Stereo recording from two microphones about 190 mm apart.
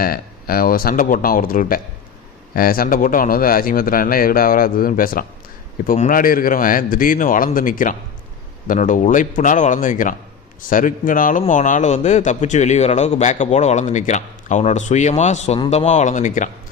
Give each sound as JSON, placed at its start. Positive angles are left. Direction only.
{"t": 0.0, "sound": "a man's voice", "side_deg": 50}